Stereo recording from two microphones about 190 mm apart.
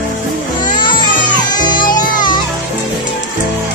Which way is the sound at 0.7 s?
25° left (ahead or behind).